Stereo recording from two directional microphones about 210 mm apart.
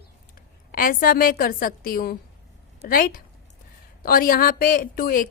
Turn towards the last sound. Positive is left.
turn(degrees=40)  # may be behind; listen again after turning